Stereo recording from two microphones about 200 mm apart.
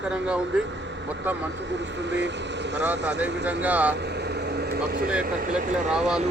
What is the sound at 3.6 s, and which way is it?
Speech, 10° right (ahead or behind).